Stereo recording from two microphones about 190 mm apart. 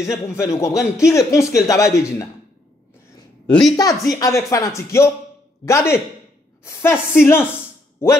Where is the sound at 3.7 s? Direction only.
20° left (ahead or behind).